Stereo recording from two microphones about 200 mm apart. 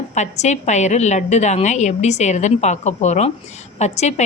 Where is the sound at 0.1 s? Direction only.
35° left (ahead or behind).